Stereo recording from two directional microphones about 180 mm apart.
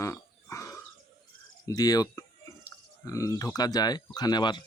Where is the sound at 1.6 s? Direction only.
20° left (ahead or behind).